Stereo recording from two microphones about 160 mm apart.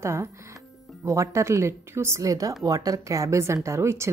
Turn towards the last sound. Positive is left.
turn(degrees=-15)  # may be behind; listen again after turning